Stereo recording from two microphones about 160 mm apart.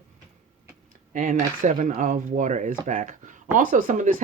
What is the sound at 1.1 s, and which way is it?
Speech, 55° right (ahead or behind).